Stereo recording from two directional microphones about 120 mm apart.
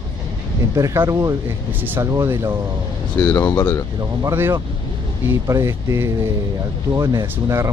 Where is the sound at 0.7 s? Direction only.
25° right (ahead or behind).